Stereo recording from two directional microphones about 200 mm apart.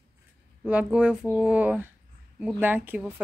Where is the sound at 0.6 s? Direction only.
5° right (ahead or behind).